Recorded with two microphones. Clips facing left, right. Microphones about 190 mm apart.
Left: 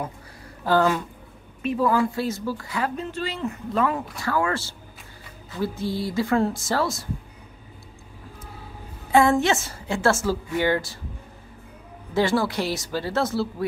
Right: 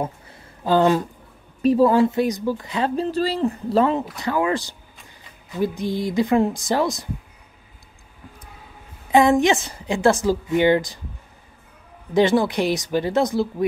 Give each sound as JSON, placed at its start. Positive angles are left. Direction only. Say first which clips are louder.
{"t": 0.7, "sound": "speech", "louder": "right 3 dB", "side_deg": -20}
{"t": 1.6, "sound": "speech", "louder": "right 6 dB", "side_deg": -30}
{"t": 4.2, "sound": "a woman's voice", "louder": "even", "side_deg": -20}
{"t": 9.1, "sound": "a woman's voice", "louder": "right 3 dB", "side_deg": -15}
{"t": 12.1, "sound": "a woman's voice", "louder": "right 5 dB", "side_deg": -20}